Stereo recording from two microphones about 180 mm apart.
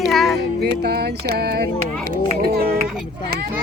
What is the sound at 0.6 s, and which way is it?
Music, 65° right (ahead or behind).